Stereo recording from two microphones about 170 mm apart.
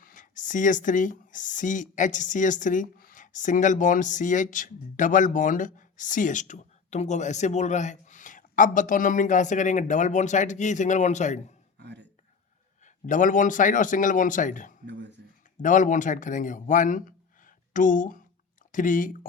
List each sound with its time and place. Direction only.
0.0 s speech: 50° left (ahead or behind)
11.8 s speech: 90° right
12.8 s speech: 50° left (ahead or behind)
14.8 s speech: 90° right
15.6 s a man's voice: 50° left (ahead or behind)